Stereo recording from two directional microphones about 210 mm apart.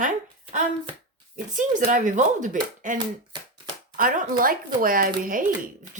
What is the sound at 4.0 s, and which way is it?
Speech, 40° right (ahead or behind).